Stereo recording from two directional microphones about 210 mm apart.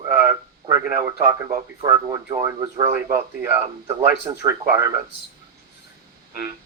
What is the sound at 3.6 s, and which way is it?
Speech, 30° right (ahead or behind).